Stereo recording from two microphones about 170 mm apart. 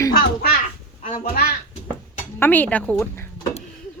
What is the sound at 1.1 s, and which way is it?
Speech, 60° left (ahead or behind).